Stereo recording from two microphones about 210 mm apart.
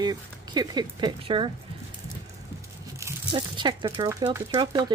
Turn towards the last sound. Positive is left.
turn(degrees=-20)  # may be behind; listen again after turning